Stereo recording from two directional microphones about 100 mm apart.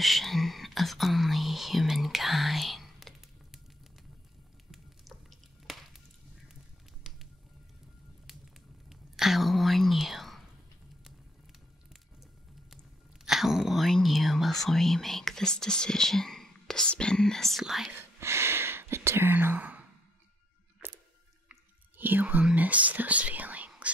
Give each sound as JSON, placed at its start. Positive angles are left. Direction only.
{"t": 0.0, "sound": "whispering", "side_deg": 0}
{"t": 5.7, "sound": "chop", "side_deg": 0}
{"t": 6.5, "sound": "patter", "side_deg": -5}
{"t": 8.8, "sound": "whispering", "side_deg": -5}
{"t": 13.2, "sound": "whispering", "side_deg": -5}
{"t": 18.2, "sound": "whispering", "side_deg": -25}
{"t": 20.8, "sound": "a sound", "side_deg": -20}
{"t": 21.5, "sound": "speech", "side_deg": -20}